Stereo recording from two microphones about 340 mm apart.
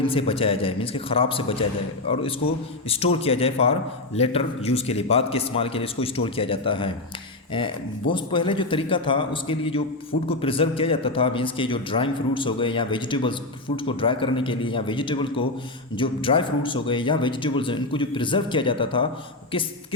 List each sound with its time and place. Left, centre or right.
0.1 s a man's voice: centre
3.2 s a man's voice: centre